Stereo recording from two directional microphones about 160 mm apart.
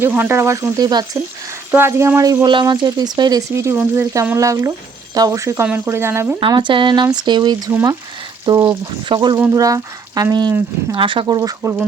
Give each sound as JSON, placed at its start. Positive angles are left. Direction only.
{"t": 0.0, "sound": "speech", "side_deg": -15}
{"t": 6.4, "sound": "speech", "side_deg": -30}
{"t": 7.7, "sound": "speech", "side_deg": -15}
{"t": 8.4, "sound": "speech", "side_deg": -25}